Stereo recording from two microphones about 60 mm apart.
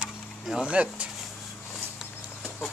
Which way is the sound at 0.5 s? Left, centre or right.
Centre.